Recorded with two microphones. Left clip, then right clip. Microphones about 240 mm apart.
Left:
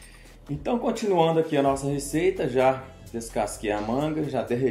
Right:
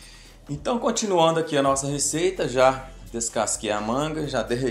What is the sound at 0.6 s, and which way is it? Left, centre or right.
Speech, centre.